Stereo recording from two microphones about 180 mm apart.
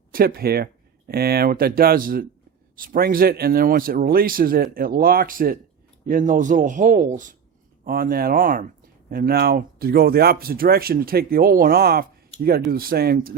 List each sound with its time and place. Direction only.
0.1 s a man's voice: 55° right (ahead or behind)